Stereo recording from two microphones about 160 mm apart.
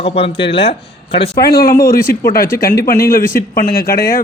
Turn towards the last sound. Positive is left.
turn(degrees=70)  # may be behind; listen again after turning